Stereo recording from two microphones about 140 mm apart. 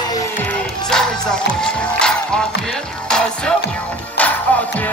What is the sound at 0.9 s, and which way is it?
Music, 5° left (ahead or behind).